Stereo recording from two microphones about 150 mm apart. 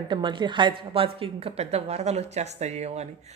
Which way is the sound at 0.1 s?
30° right (ahead or behind).